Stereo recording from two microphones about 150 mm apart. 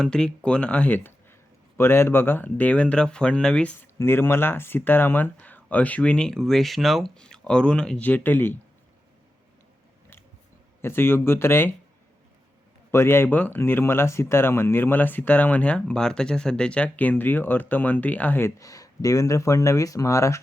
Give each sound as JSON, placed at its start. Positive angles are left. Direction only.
{"t": 0.0, "sound": "speech", "side_deg": 5}
{"t": 10.8, "sound": "speech", "side_deg": 15}
{"t": 12.9, "sound": "speech", "side_deg": 15}